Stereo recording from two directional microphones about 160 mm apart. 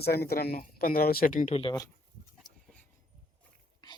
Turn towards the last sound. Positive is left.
turn(degrees=25)  # may be behind; listen again after turning